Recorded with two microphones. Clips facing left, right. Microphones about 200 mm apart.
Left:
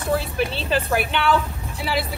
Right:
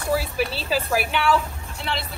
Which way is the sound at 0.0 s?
Centre (ahead or behind).